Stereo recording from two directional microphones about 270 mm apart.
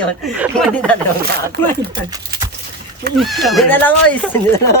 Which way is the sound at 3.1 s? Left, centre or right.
Centre.